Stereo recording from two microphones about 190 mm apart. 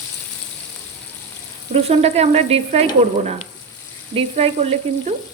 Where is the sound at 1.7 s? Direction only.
35° right (ahead or behind).